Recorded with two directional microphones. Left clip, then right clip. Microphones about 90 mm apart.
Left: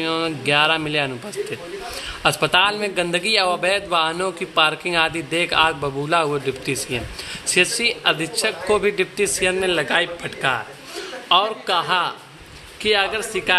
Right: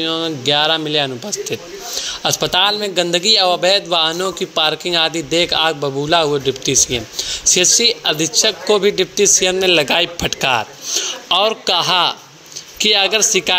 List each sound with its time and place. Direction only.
0.0 s a man's voice: 10° right (ahead or behind)
9.7 s speech: 45° right (ahead or behind)
10.2 s a man's voice: 75° right (ahead or behind)
12.7 s speech: 50° right (ahead or behind)